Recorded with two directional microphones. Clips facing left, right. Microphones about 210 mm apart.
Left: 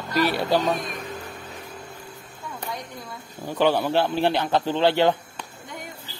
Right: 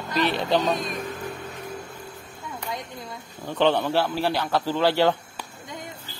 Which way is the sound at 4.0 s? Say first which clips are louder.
Left 2 dB; 20° left (ahead or behind).